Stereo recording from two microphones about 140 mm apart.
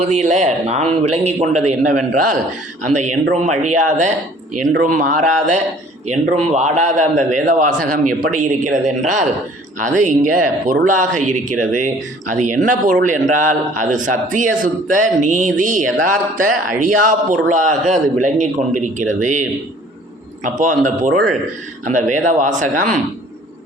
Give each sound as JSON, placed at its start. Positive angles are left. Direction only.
{"t": 0.0, "sound": "a man's voice", "side_deg": -55}
{"t": 4.9, "sound": "speech", "side_deg": -75}
{"t": 6.1, "sound": "a man's voice", "side_deg": -55}